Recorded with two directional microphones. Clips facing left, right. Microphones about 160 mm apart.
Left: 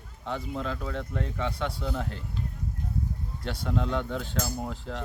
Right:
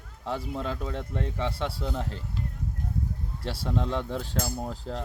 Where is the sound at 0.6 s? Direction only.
30° right (ahead or behind).